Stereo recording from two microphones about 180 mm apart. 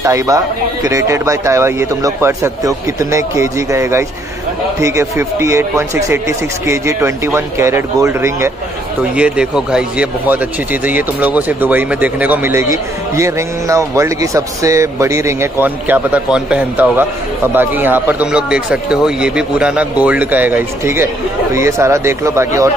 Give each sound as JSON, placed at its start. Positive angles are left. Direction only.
{"t": 0.0, "sound": "a man's voice", "side_deg": -20}